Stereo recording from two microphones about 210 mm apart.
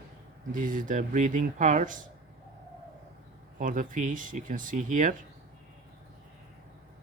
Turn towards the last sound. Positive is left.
turn(degrees=-35)  # may be behind; listen again after turning